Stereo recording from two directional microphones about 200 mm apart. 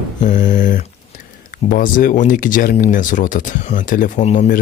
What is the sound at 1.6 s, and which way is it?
Speech, 40° left (ahead or behind).